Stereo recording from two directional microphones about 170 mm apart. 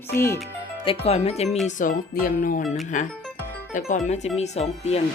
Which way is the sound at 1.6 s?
55° left (ahead or behind).